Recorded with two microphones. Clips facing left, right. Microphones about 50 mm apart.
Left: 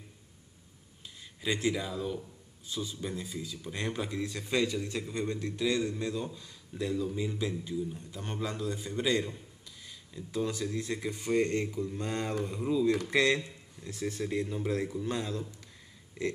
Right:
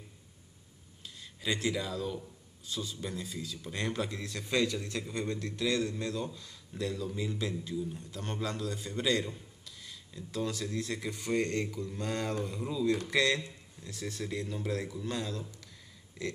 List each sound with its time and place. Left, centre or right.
1.0 s a man's voice: centre